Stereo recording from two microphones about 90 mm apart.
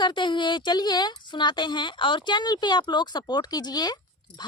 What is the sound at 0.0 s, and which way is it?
A woman's voice, 60° left (ahead or behind).